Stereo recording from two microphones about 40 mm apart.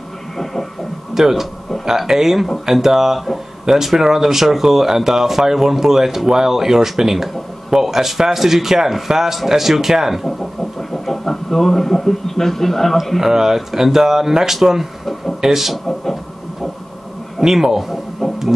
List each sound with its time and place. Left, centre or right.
1.1 s speech: centre
10.6 s a sound: centre
12.9 s speech: centre
13.2 s speech: centre
17.4 s speech: centre
18.2 s heart murmur: centre